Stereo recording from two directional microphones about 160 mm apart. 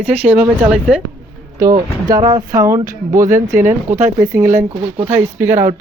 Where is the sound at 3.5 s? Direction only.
55° right (ahead or behind).